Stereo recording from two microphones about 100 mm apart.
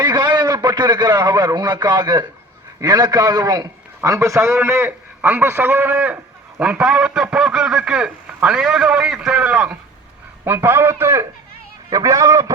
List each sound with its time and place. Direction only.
0.0 s a man's voice: 45° right (ahead or behind)